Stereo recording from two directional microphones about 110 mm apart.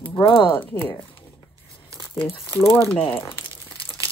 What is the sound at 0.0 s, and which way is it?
Speech, 50° left (ahead or behind).